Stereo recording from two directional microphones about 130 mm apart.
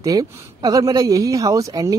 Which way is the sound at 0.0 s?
30° right (ahead or behind).